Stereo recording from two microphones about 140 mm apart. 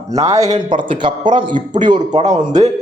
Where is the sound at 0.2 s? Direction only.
25° right (ahead or behind).